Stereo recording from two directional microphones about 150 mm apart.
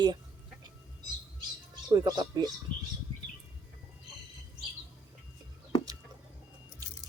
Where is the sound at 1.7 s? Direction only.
25° right (ahead or behind).